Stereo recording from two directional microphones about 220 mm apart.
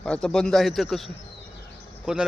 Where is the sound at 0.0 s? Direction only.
5° left (ahead or behind).